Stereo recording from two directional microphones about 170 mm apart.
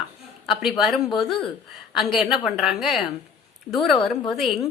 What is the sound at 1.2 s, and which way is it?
Speech, 30° left (ahead or behind).